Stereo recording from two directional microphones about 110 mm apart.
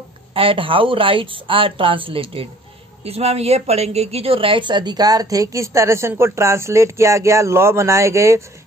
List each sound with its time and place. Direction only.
0.3 s speech: 55° right (ahead or behind)
3.0 s a woman's voice: 70° right (ahead or behind); by 8.4 s 25° right (ahead or behind)